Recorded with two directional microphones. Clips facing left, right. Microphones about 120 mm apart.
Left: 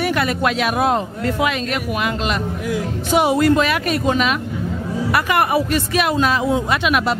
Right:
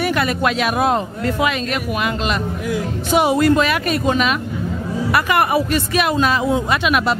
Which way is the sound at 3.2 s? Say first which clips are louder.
Even; 20° right (ahead or behind).